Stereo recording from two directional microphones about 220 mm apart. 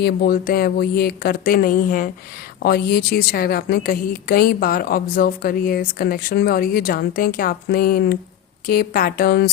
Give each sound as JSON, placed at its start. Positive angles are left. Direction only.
{"t": 0.0, "sound": "a woman's voice", "side_deg": 45}